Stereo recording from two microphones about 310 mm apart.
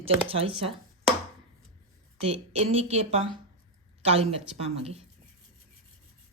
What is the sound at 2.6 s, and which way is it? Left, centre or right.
Speech, centre.